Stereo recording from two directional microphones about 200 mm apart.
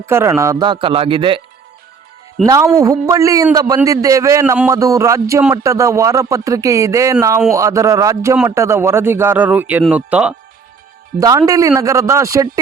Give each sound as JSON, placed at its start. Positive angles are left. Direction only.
{"t": 0.0, "sound": "speech", "side_deg": -15}
{"t": 2.4, "sound": "speech", "side_deg": 0}
{"t": 2.7, "sound": "speech", "side_deg": -15}
{"t": 11.2, "sound": "speech", "side_deg": -15}